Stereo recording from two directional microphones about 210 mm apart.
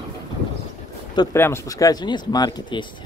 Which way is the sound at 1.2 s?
10° left (ahead or behind).